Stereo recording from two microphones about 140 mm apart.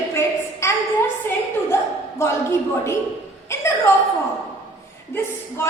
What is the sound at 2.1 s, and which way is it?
Speech, 20° left (ahead or behind).